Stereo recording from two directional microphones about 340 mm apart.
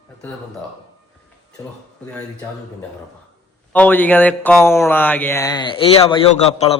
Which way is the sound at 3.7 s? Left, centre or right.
Centre.